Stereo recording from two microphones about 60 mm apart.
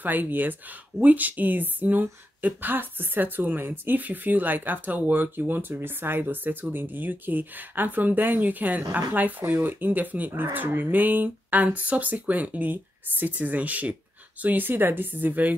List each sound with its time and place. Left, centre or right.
0.0 s speech: right